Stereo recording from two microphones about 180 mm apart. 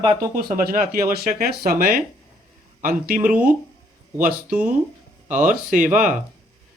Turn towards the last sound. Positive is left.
turn(degrees=-45)  # may be behind; listen again after turning